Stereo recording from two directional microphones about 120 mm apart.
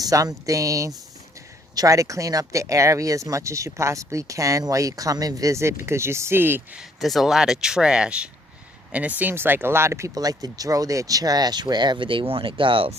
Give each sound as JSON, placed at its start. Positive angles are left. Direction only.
{"t": 0.0, "sound": "speech", "side_deg": -30}
{"t": 6.7, "sound": "speech", "side_deg": 0}